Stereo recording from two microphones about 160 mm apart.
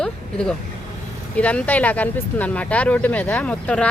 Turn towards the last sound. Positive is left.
turn(degrees=5)  # may be behind; listen again after turning